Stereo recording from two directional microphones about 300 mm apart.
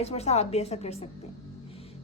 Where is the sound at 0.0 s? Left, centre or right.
Left.